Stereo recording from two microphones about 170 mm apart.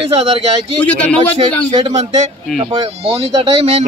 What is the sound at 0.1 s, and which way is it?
Speech, 35° right (ahead or behind).